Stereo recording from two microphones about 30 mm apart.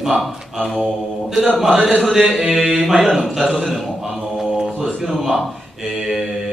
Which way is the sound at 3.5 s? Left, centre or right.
Centre.